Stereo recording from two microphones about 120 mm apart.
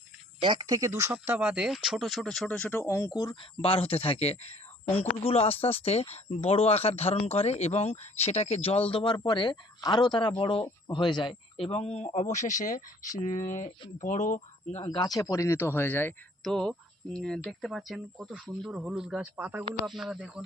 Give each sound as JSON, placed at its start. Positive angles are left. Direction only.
{"t": 0.4, "sound": "speech", "side_deg": -40}
{"t": 1.1, "sound": "speech", "side_deg": -15}
{"t": 3.6, "sound": "speech", "side_deg": 50}
{"t": 14.8, "sound": "speech", "side_deg": 35}
{"t": 16.4, "sound": "speech", "side_deg": 5}
{"t": 19.8, "sound": "speech", "side_deg": 0}